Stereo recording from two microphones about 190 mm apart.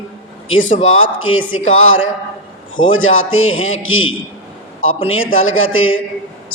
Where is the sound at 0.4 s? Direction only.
90° left.